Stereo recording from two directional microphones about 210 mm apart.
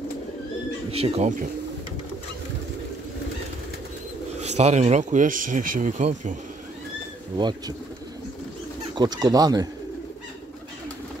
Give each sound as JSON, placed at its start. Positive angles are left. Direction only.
{"t": 0.9, "sound": "speech", "side_deg": -30}
{"t": 4.4, "sound": "speech", "side_deg": -30}
{"t": 7.3, "sound": "speech", "side_deg": -20}
{"t": 8.9, "sound": "speech", "side_deg": -20}